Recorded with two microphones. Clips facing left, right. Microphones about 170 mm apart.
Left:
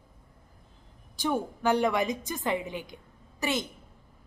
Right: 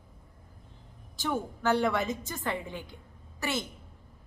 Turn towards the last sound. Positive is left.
turn(degrees=15)  # may be behind; listen again after turning